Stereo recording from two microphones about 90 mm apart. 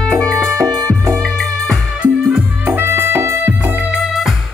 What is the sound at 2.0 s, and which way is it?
Music, 10° right (ahead or behind).